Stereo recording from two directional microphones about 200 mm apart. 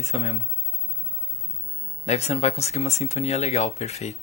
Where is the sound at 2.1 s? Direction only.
30° left (ahead or behind).